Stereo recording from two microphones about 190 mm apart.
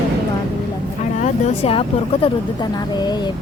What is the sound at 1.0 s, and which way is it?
Speech, 40° left (ahead or behind).